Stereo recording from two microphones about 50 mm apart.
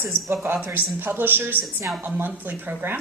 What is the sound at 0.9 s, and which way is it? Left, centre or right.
A woman's voice, right.